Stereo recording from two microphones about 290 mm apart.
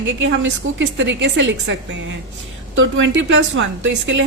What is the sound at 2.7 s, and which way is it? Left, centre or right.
Speech, right.